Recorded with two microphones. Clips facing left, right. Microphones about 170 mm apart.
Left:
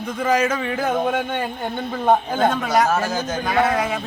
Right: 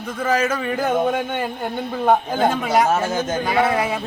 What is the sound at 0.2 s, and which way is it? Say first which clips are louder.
Speech: left 1 dB; 10° left (ahead or behind).